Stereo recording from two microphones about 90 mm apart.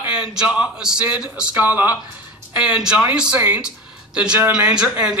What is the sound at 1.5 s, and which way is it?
A man's voice, 20° right (ahead or behind).